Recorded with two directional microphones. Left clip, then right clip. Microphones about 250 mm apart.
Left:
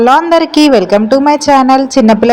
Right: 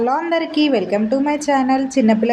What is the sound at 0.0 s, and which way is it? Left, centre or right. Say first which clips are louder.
A woman's voice: left 11 dB; left.